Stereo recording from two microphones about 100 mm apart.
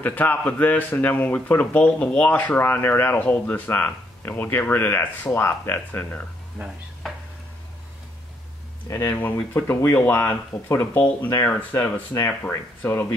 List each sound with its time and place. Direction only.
0.0 s speech: 15° left (ahead or behind)
6.6 s speech: 20° right (ahead or behind)
7.0 s tick-tock: centre (ahead or behind)
8.8 s speech: 30° left (ahead or behind)
9.1 s speech: 15° left (ahead or behind)
11.7 s speech: 30° left (ahead or behind)